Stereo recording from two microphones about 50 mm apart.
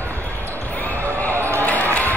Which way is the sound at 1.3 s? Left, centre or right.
Right.